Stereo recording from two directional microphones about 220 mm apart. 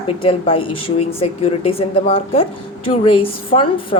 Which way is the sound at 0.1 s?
25° left (ahead or behind).